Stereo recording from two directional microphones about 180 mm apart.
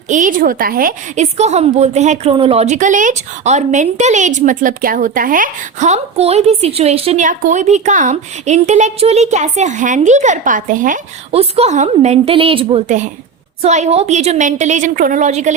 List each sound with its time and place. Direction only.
0.1 s a woman's voice: 45° right (ahead or behind)
11.3 s a woman's voice: 35° right (ahead or behind)